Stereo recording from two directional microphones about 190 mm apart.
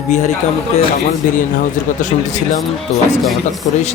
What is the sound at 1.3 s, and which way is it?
Speech, 45° left (ahead or behind).